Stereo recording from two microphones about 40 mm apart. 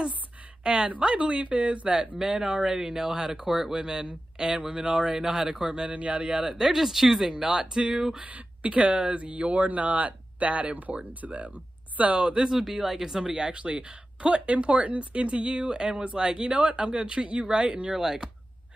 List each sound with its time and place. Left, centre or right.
0.7 s speech: right
2.1 s speech: centre
5.9 s speech: right
6.5 s speech: centre
8.2 s speech: right
12.4 s speech: centre
13.3 s speech: right
17.9 s speech: centre